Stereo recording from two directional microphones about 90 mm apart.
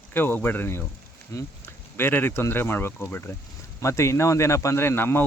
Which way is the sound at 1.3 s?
35° left (ahead or behind).